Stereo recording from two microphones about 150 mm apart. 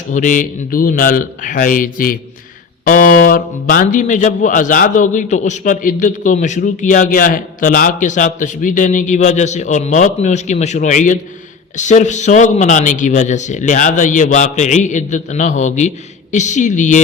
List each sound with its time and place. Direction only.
0.1 s a man's voice: 60° left (ahead or behind)